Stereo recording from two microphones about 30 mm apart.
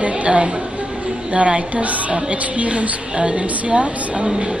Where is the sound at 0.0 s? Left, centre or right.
Right.